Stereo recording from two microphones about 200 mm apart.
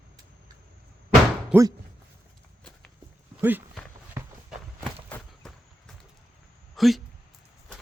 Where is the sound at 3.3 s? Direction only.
5° right (ahead or behind).